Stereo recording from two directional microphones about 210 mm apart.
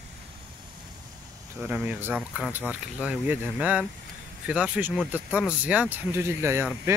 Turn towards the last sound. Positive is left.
turn(degrees=-10)  # may be behind; listen again after turning